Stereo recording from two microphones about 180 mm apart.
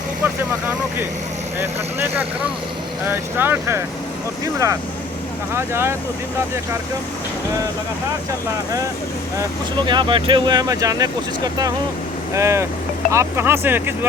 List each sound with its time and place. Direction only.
1.5 s speech: 10° right (ahead or behind)
5.5 s speech: 15° right (ahead or behind)
9.4 s speech: 25° right (ahead or behind)